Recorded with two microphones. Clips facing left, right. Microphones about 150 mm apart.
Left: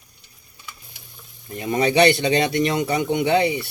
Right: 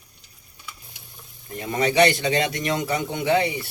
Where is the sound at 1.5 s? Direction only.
25° left (ahead or behind).